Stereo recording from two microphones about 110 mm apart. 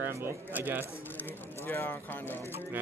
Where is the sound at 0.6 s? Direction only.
15° right (ahead or behind).